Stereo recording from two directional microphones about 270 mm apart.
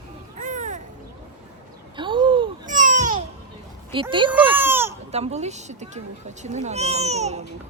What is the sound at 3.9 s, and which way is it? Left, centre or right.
Speech, centre.